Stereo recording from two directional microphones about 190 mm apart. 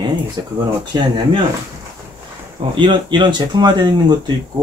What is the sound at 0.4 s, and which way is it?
Speech, 20° right (ahead or behind).